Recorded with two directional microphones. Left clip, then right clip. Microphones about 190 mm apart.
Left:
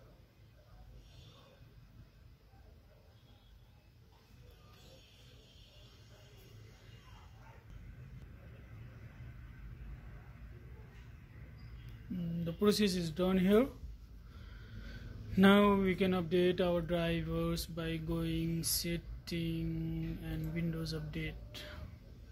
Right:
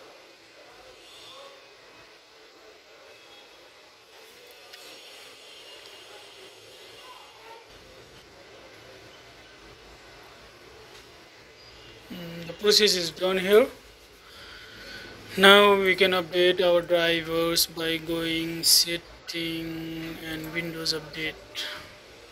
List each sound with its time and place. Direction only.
12.6 s speech: 15° left (ahead or behind)
15.3 s speech: 5° left (ahead or behind)